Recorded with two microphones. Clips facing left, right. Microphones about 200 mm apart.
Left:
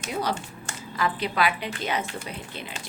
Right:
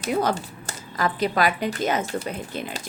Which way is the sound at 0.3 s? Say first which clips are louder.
Right 2 dB; 35° right (ahead or behind).